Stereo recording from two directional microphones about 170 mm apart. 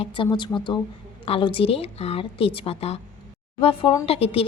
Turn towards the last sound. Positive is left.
turn(degrees=35)  # may be behind; listen again after turning